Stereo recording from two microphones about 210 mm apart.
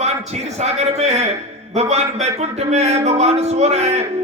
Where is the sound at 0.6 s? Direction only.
30° right (ahead or behind).